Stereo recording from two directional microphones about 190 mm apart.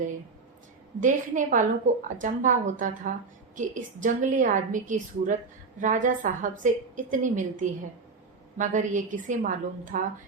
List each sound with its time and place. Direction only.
1.0 s a woman's voice: 45° right (ahead or behind)